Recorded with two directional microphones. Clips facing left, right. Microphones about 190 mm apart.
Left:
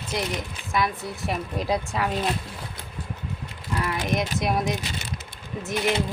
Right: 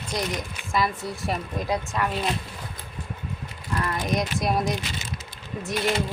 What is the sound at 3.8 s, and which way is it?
Speech, 5° left (ahead or behind).